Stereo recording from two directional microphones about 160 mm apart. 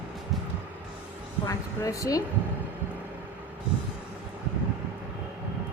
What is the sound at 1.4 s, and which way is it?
Speech, 20° left (ahead or behind).